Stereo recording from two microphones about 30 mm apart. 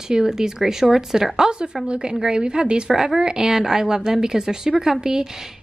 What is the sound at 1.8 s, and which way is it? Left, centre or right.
A woman's voice, right.